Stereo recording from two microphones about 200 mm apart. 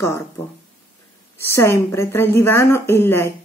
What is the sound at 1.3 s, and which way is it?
A woman's voice, 10° left (ahead or behind).